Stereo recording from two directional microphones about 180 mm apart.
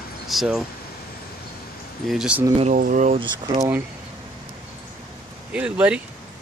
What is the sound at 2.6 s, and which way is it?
Speech, 50° right (ahead or behind).